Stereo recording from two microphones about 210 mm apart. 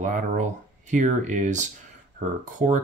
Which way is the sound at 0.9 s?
35° right (ahead or behind).